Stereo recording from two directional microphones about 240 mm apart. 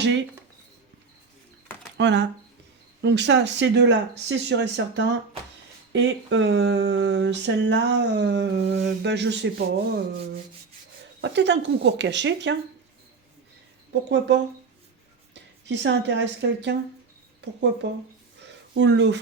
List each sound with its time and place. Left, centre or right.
0.0 s speech: right
2.0 s speech: right
11.2 s speech: right
13.9 s speech: right
15.6 s speech: right
18.4 s a sound: right